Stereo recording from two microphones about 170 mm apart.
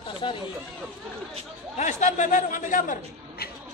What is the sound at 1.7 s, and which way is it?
A man's voice, 45° left (ahead or behind).